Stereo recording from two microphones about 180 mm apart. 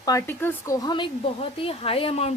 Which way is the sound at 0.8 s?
25° left (ahead or behind).